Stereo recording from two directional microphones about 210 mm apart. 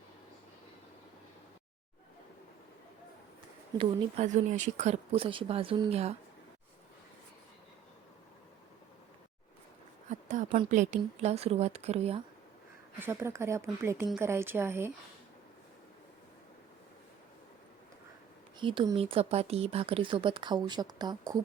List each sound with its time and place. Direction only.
3.8 s speech: 35° right (ahead or behind)
10.1 s a woman's voice: 35° right (ahead or behind)
13.0 s a woman's voice: 10° right (ahead or behind)
18.6 s speech: 25° right (ahead or behind)